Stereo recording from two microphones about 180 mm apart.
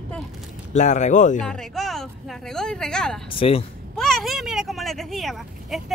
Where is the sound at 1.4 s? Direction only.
5° left (ahead or behind).